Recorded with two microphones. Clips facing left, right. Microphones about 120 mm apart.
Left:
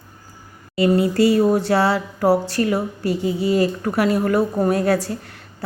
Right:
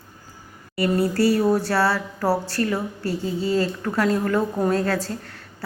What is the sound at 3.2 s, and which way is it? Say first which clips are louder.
Speech: left 4 dB; 85° left.